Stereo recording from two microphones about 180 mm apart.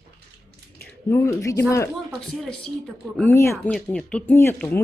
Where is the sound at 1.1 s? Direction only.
15° left (ahead or behind).